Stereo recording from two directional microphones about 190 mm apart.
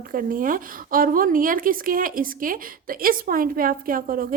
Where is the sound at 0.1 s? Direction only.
45° right (ahead or behind).